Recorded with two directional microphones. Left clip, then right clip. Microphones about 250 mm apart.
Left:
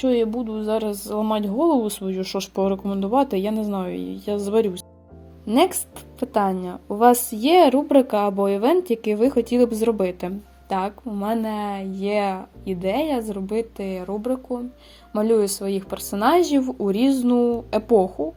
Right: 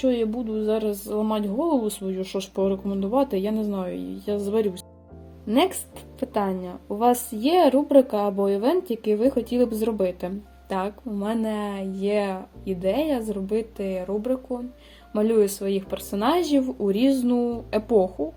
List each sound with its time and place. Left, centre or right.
0.0 s a woman's voice: left